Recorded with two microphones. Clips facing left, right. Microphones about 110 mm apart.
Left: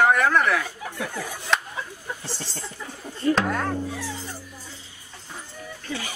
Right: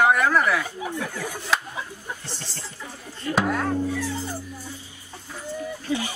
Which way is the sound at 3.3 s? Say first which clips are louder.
Right 1 dB; 5° right (ahead or behind).